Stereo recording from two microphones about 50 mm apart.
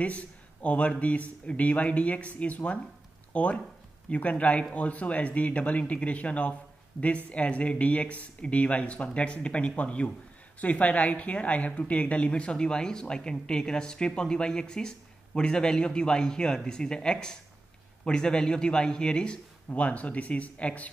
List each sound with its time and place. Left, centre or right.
0.0 s a man's voice: left
19.7 s speech: left